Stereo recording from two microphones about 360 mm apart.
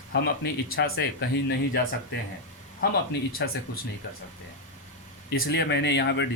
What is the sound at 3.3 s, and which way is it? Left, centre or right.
Speech, left.